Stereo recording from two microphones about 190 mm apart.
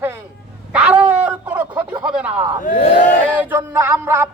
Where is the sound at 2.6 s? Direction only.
40° left (ahead or behind).